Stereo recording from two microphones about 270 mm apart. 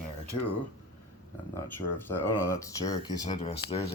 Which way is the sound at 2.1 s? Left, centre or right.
Centre.